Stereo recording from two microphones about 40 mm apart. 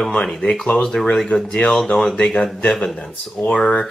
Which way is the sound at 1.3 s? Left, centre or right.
Left.